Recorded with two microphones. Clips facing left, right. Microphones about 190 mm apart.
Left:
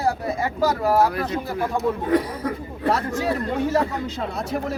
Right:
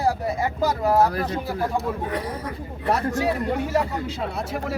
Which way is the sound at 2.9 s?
15° right (ahead or behind).